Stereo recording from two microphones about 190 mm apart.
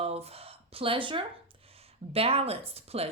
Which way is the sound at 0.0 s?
30° right (ahead or behind).